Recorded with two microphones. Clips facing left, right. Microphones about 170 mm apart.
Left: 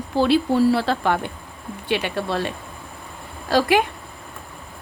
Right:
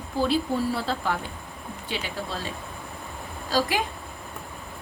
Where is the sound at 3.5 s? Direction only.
65° left (ahead or behind).